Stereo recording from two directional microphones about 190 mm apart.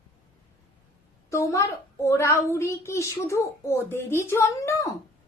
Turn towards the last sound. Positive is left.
turn(degrees=15)  # may be behind; listen again after turning